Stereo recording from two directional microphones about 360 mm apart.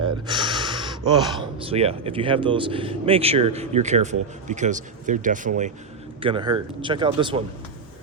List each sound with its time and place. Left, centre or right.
0.3 s speech: centre